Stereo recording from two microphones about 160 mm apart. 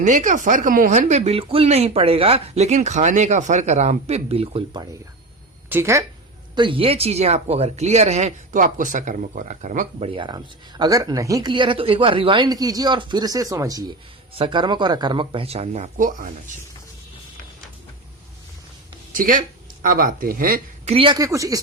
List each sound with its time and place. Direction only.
0.0 s speech: 50° right (ahead or behind); by 4.9 s 30° right (ahead or behind)
5.6 s speech: 15° right (ahead or behind)
6.6 s speech: 35° right (ahead or behind); by 10.1 s 50° right (ahead or behind)
10.1 s speech: 30° right (ahead or behind); by 16.3 s 55° right (ahead or behind)
19.1 s speech: 60° right (ahead or behind)
20.8 s speech: 35° right (ahead or behind)